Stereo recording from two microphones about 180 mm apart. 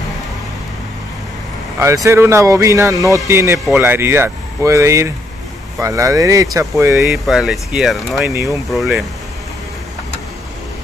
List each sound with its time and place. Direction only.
2.0 s speech: 15° right (ahead or behind)
7.1 s speech: centre (ahead or behind)